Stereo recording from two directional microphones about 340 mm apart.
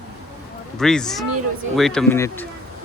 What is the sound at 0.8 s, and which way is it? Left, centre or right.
Speech, centre.